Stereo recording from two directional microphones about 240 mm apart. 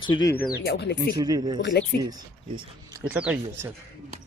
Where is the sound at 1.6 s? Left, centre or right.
Left.